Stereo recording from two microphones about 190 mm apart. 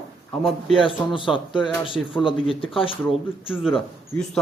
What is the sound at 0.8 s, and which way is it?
Speech, 25° left (ahead or behind).